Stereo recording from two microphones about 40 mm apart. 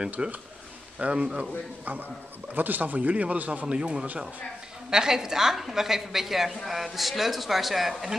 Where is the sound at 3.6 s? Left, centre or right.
Right.